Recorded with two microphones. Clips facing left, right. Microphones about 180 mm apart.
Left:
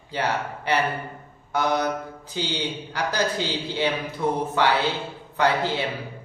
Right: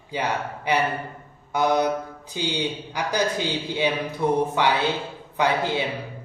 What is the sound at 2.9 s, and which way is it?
Speech, 15° right (ahead or behind).